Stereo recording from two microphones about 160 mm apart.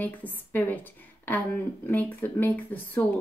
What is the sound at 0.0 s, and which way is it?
A woman's voice, 10° left (ahead or behind).